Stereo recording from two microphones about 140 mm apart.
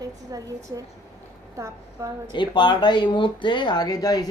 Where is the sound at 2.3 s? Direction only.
35° left (ahead or behind).